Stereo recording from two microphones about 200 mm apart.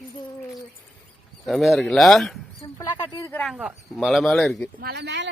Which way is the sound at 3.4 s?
5° right (ahead or behind).